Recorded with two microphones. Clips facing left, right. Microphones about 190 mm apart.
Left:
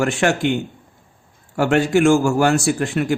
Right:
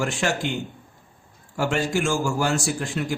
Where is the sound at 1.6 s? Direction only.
65° left (ahead or behind).